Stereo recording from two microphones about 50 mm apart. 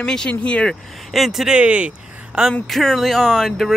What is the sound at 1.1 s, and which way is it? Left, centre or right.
Speech, centre.